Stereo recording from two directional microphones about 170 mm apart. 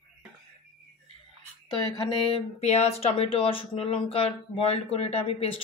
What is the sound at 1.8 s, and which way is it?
Speech, 25° left (ahead or behind).